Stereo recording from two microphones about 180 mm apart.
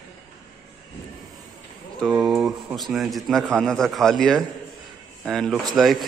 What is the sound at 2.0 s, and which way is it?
A man's voice, centre (ahead or behind).